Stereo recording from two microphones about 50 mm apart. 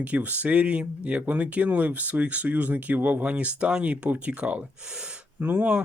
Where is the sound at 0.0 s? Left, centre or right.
Right.